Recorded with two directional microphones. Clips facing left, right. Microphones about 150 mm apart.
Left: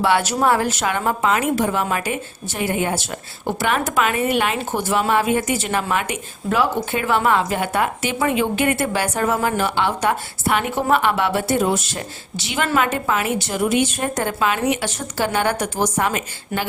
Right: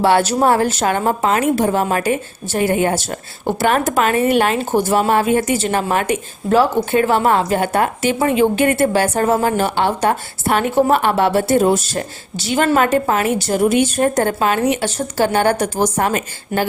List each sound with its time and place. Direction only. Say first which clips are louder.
0.0 s a woman's voice: right 4 dB; 30° right (ahead or behind)